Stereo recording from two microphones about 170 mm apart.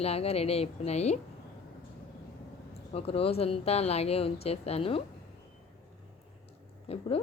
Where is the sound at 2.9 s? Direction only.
35° left (ahead or behind).